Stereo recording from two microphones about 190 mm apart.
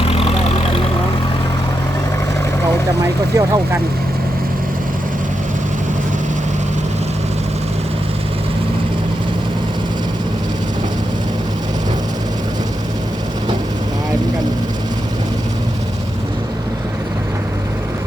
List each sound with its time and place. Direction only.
0.1 s vehicle: 30° left (ahead or behind)
3.3 s speech: 15° right (ahead or behind)